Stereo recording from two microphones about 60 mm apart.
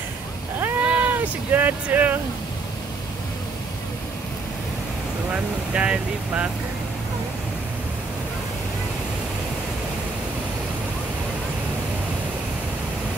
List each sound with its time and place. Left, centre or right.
0.8 s boat: right
1.1 s vehicle: right
5.3 s speech: centre